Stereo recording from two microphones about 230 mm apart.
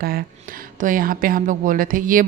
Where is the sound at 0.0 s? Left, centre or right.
Right.